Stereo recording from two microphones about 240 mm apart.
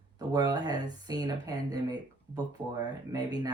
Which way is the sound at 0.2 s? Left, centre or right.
Centre.